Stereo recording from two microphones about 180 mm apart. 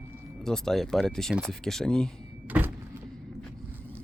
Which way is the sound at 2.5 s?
10° right (ahead or behind).